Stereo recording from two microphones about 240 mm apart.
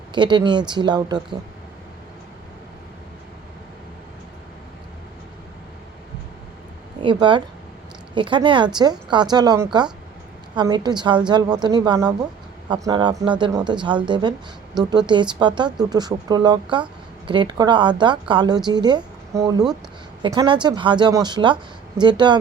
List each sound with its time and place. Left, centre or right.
0.1 s speech: centre
7.0 s speech: centre